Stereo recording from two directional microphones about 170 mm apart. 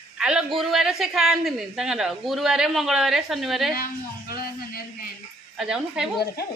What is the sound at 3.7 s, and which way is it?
A woman's voice, 60° left (ahead or behind).